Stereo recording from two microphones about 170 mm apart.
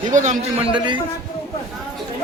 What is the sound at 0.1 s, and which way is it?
Speech, 45° right (ahead or behind).